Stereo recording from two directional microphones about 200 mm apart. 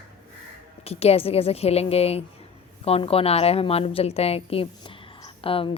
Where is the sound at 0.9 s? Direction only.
30° left (ahead or behind).